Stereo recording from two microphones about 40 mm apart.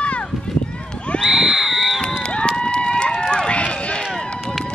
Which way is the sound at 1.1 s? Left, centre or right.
Centre.